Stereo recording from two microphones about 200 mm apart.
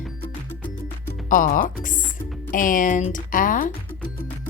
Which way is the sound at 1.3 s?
45° left (ahead or behind).